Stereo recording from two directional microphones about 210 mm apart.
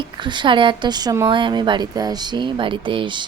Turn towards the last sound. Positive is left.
turn(degrees=-25)  # may be behind; listen again after turning